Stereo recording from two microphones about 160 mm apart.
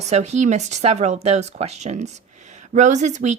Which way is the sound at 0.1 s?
45° right (ahead or behind).